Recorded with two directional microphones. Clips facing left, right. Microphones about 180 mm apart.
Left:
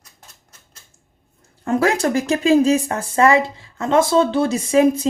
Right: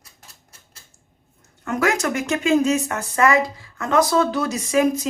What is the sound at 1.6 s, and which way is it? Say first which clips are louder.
Speech: left 4 dB; 30° left (ahead or behind).